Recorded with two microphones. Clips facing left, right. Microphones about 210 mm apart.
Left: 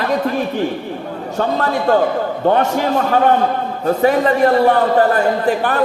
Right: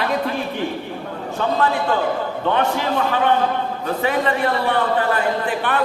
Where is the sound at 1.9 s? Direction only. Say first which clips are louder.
Left 6 dB; 45° left (ahead or behind).